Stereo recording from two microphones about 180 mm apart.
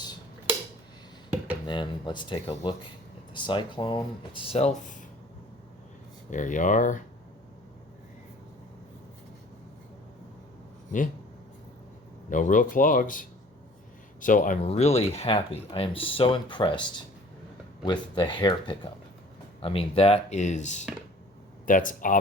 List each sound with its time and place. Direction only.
1.6 s speech: 25° left (ahead or behind); by 5.0 s 45° left (ahead or behind)
6.3 s speech: 45° left (ahead or behind)
12.3 s speech: 45° left (ahead or behind)